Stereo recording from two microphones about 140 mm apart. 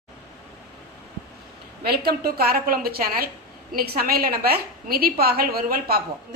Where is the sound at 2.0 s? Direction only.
90° right.